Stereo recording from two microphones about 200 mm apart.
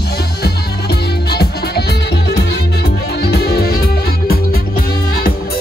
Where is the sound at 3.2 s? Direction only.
50° left (ahead or behind).